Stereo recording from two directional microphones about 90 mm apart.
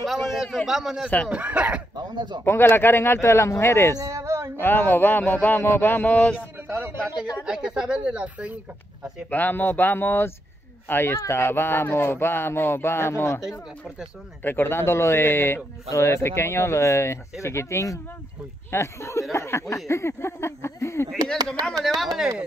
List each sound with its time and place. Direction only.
0.0 s a man's voice: 5° right (ahead or behind)
1.3 s speech: 15° right (ahead or behind)
2.0 s speech: 55° right (ahead or behind)
2.4 s speech: 25° left (ahead or behind)
4.0 s a sound: 35° right (ahead or behind)
4.6 s speech: 25° left (ahead or behind)
7.4 s speech: 10° right (ahead or behind)
9.3 s speech: 20° left (ahead or behind)
13.4 s speech: 5° right (ahead or behind)
14.4 s speech: 25° left (ahead or behind)
21.4 s speech: 45° right (ahead or behind)
21.8 s speech: centre (ahead or behind)